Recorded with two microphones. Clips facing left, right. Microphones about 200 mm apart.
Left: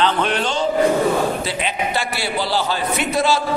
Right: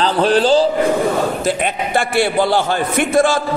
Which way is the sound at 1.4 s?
50° right (ahead or behind).